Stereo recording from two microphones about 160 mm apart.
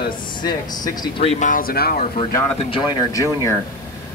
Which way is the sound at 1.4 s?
65° left (ahead or behind).